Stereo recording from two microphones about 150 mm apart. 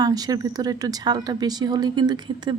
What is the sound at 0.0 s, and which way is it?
Speech, 25° right (ahead or behind).